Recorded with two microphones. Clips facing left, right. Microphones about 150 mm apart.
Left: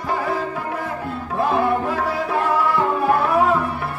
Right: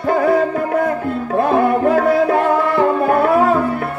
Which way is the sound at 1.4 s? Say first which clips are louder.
Right 5 dB; 60° right (ahead or behind).